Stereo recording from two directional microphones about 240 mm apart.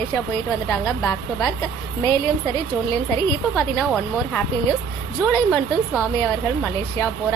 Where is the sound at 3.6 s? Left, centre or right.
Centre.